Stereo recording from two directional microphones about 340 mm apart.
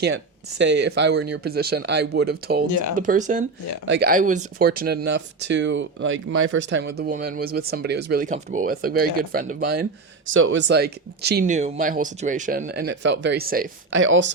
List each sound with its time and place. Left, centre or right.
0.6 s speech: right
2.6 s speech: left
2.9 s speech: right